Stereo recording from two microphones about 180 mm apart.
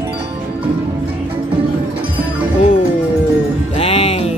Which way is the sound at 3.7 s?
35° left (ahead or behind).